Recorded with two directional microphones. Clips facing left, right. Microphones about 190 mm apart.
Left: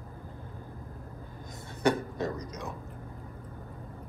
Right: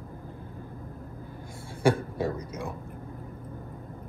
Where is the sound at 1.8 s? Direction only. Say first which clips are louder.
Right 3 dB; 10° right (ahead or behind).